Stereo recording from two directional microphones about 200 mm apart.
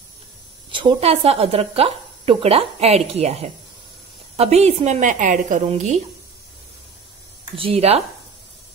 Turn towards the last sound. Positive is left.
turn(degrees=-30)  # may be behind; listen again after turning